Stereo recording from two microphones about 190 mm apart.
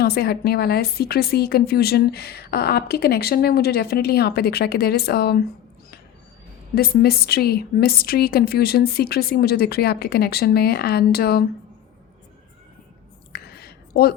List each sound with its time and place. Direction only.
0.0 s a woman's voice: 55° left (ahead or behind)
6.7 s a woman's voice: 55° left (ahead or behind)
13.3 s a sound: 55° left (ahead or behind)